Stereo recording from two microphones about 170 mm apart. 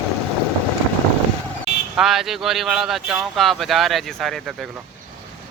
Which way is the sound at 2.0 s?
Centre (ahead or behind).